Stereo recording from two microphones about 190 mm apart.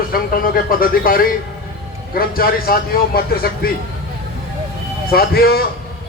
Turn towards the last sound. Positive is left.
turn(degrees=55)  # may be behind; listen again after turning